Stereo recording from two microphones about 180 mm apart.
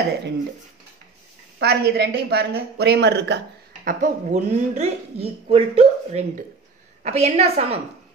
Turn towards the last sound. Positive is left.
turn(degrees=-35)  # may be behind; listen again after turning